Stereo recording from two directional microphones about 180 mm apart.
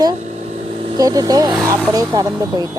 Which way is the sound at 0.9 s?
20° right (ahead or behind).